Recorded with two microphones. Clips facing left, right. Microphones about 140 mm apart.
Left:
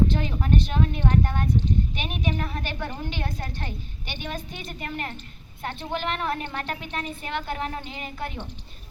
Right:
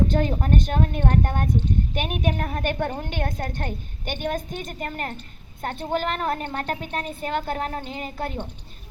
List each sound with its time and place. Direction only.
0.1 s a woman's voice: 45° right (ahead or behind)